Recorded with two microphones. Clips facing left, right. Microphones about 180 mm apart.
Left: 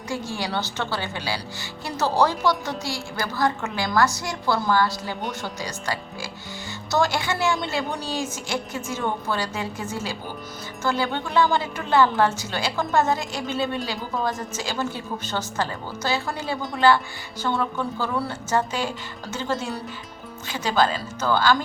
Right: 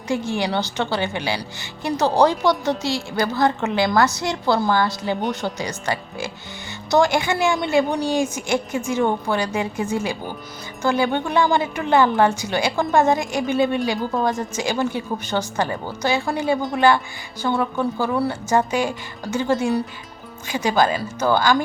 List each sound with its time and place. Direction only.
0.1 s a woman's voice: 20° right (ahead or behind)